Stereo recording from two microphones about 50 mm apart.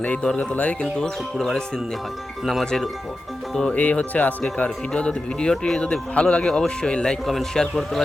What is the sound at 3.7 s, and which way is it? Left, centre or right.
Speech, left.